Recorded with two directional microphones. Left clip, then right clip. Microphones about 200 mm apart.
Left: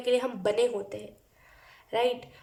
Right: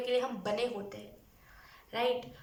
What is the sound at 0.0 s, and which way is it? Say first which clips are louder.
A woman's voice: left 6 dB; 45° left (ahead or behind).